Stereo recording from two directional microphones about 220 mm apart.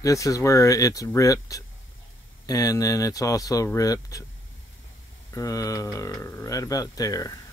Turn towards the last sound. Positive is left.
turn(degrees=15)  # may be behind; listen again after turning